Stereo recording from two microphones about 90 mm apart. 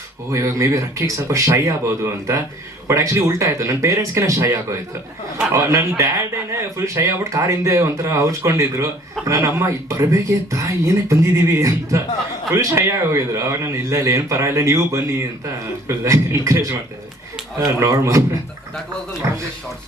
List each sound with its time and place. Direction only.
0.3 s speech: 35° right (ahead or behind)
17.7 s speech: 35° right (ahead or behind)